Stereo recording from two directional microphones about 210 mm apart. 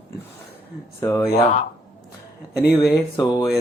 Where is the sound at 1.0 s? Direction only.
10° left (ahead or behind).